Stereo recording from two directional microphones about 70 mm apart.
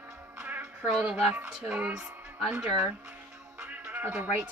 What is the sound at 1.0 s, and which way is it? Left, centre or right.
A woman's voice, centre.